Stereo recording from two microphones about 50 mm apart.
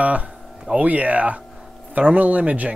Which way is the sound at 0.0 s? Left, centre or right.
Right.